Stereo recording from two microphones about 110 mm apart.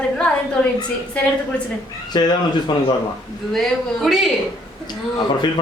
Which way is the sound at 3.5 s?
Centre (ahead or behind).